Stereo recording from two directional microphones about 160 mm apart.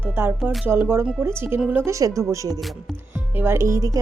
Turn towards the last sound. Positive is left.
turn(degrees=-20)  # may be behind; listen again after turning